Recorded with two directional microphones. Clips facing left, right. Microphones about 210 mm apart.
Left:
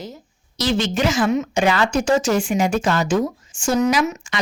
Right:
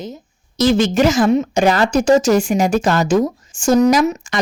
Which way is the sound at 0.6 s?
45° right (ahead or behind).